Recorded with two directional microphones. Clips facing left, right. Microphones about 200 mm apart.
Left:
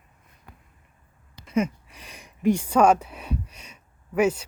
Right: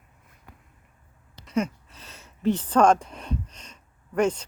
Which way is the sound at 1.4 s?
10° left (ahead or behind).